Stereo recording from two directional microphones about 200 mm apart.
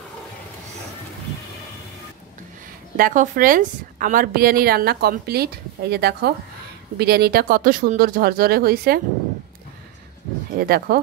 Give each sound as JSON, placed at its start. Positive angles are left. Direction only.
{"t": 3.0, "sound": "a woman's voice", "side_deg": -45}
{"t": 10.6, "sound": "a woman's voice", "side_deg": -50}